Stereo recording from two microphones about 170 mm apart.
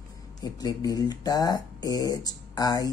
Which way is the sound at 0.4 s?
20° left (ahead or behind).